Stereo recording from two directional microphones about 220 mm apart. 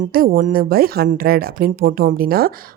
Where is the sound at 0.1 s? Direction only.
40° right (ahead or behind).